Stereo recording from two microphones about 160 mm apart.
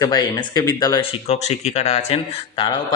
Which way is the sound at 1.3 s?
45° left (ahead or behind).